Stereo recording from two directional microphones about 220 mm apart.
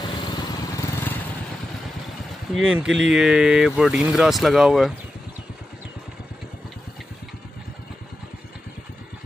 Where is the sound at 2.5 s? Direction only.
5° right (ahead or behind).